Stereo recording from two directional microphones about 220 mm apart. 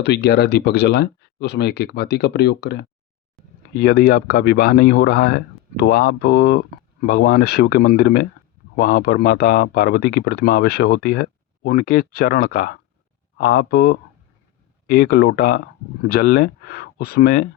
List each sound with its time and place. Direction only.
0.0 s speech: 50° left (ahead or behind)